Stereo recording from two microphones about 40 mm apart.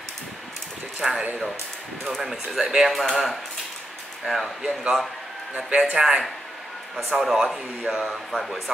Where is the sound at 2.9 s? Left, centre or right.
Centre.